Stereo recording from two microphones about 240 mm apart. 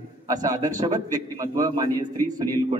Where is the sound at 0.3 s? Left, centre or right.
Centre.